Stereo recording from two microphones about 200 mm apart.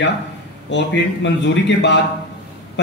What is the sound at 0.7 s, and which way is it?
Speech, 60° left (ahead or behind).